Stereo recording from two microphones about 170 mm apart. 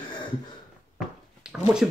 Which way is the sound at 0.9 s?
5° right (ahead or behind).